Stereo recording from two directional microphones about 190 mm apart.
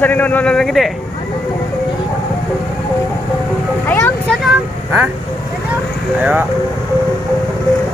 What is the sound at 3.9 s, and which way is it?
Vehicle, 10° left (ahead or behind).